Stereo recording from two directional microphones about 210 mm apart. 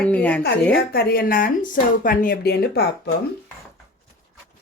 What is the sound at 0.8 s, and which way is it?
Speech, 50° left (ahead or behind).